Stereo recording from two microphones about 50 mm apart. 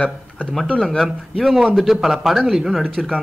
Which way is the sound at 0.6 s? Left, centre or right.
Centre.